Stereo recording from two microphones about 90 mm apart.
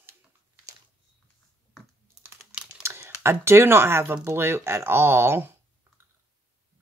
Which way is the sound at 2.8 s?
30° right (ahead or behind).